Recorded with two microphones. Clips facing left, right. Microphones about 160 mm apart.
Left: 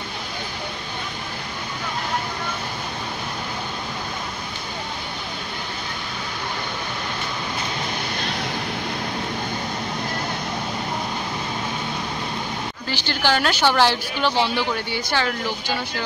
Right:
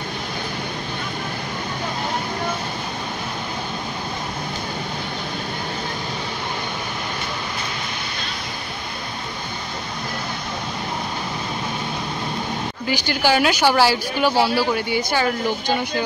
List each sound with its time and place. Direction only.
12.8 s a woman's voice: 10° right (ahead or behind)